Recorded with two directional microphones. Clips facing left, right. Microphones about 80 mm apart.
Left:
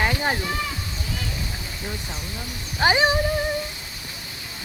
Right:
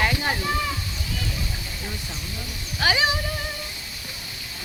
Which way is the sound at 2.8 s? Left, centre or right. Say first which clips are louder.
Left 3 dB; left.